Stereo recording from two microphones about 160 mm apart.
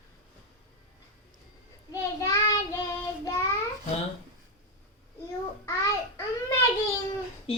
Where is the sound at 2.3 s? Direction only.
20° left (ahead or behind).